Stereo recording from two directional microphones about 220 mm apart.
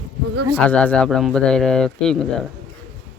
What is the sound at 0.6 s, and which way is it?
Speech, 5° left (ahead or behind).